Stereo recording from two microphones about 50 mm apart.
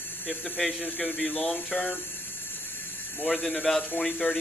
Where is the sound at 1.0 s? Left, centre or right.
Left.